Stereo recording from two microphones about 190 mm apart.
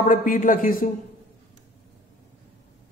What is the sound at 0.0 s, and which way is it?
Speech, 45° left (ahead or behind).